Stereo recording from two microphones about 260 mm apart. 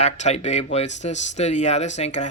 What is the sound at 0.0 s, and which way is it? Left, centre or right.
Speech, left.